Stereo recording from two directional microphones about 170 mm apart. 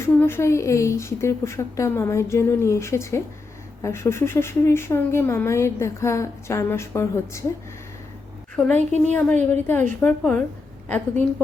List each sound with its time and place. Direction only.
0.2 s speech: 15° left (ahead or behind)
8.5 s speech: 5° left (ahead or behind)